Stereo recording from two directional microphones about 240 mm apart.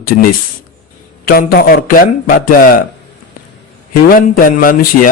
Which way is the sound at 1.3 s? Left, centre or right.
Left.